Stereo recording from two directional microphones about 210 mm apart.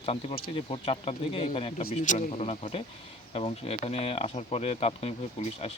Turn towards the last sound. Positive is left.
turn(degrees=30)  # may be behind; listen again after turning